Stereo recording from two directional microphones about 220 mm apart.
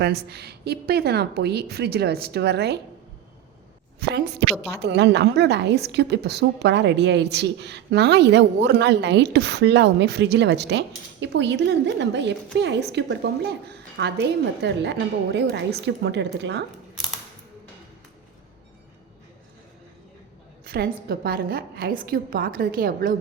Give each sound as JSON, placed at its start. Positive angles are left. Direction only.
{"t": 0.0, "sound": "a woman's voice", "side_deg": -45}
{"t": 4.0, "sound": "a woman's voice", "side_deg": -50}
{"t": 20.7, "sound": "a woman's voice", "side_deg": -45}